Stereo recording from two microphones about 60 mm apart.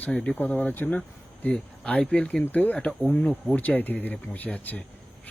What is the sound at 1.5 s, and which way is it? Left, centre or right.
Speech, centre.